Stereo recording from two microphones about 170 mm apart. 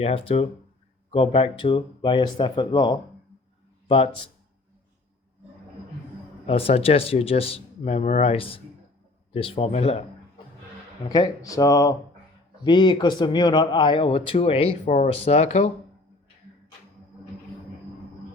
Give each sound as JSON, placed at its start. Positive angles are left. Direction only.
{"t": 0.0, "sound": "speech", "side_deg": 35}
{"t": 6.4, "sound": "speech", "side_deg": 35}
{"t": 11.1, "sound": "speech", "side_deg": 20}